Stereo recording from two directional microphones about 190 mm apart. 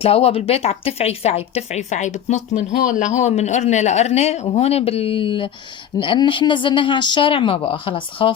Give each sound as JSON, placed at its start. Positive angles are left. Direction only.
{"t": 0.0, "sound": "speech", "side_deg": 30}